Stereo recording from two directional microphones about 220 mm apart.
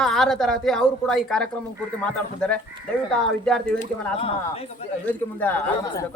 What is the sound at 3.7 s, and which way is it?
Speech, 25° left (ahead or behind).